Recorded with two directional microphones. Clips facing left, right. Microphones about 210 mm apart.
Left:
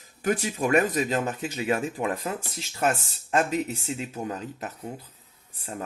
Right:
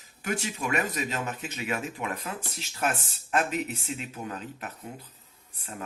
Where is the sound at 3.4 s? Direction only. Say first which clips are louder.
Left 3 dB; 35° left (ahead or behind).